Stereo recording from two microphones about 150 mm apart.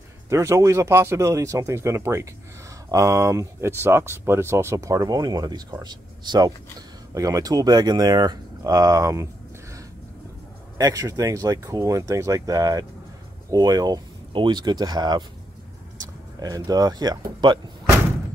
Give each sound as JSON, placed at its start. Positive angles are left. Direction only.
{"t": 0.3, "sound": "speech", "side_deg": -20}
{"t": 10.8, "sound": "speech", "side_deg": -25}
{"t": 16.3, "sound": "speech", "side_deg": -25}